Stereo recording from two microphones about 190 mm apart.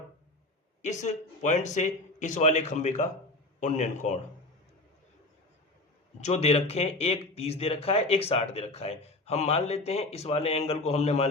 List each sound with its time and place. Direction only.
0.8 s speech: 35° left (ahead or behind)
6.1 s speech: 35° left (ahead or behind)